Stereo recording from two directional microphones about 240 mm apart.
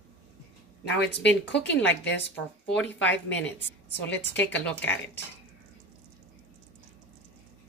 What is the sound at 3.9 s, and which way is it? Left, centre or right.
Speech, left.